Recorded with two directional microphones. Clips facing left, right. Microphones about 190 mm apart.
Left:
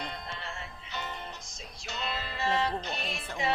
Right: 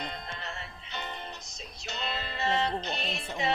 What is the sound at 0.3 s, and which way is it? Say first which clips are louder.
Music: even; 45° right (ahead or behind).